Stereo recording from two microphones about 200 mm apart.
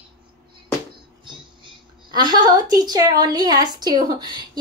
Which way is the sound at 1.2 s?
25° right (ahead or behind).